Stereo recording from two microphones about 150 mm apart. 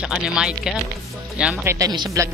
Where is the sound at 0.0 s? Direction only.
5° right (ahead or behind).